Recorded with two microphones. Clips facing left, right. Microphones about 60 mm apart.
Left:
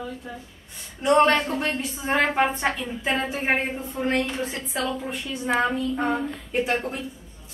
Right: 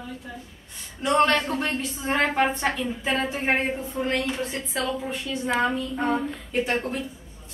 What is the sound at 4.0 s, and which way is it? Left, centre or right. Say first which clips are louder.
Speech: left 3 dB; left.